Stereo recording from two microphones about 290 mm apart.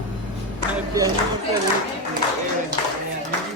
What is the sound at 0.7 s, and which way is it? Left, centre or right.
Speech, centre.